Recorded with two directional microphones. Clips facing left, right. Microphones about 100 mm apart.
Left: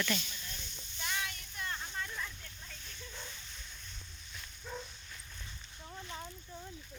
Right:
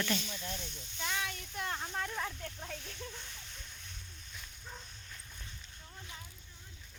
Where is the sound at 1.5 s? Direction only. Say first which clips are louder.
Right 3 dB; 85° right.